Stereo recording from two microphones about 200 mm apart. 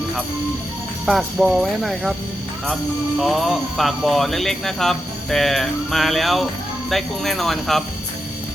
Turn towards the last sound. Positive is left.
turn(degrees=0)  # may be behind; listen again after turning